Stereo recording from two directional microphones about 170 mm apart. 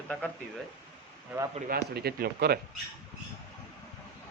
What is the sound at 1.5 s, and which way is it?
Speech, 55° right (ahead or behind).